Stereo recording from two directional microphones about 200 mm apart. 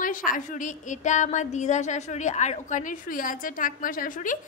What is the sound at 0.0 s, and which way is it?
A woman's voice, 40° left (ahead or behind).